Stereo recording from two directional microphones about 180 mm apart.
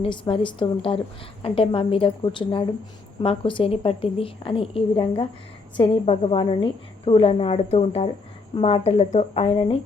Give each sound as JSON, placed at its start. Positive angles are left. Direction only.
{"t": 0.0, "sound": "a woman's voice", "side_deg": 30}